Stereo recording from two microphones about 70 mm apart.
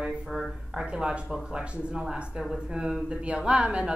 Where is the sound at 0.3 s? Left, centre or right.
Centre.